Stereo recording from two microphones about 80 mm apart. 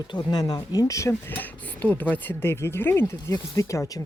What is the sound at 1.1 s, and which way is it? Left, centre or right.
Speech, left.